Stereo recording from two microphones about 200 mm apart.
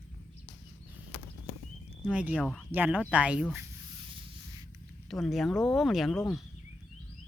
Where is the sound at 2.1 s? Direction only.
5° right (ahead or behind).